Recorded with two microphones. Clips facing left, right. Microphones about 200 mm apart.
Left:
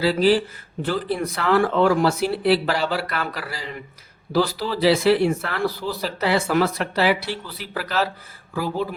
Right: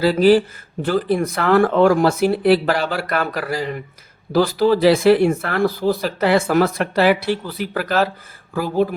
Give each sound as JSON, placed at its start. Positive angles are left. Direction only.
{"t": 0.0, "sound": "speech", "side_deg": -45}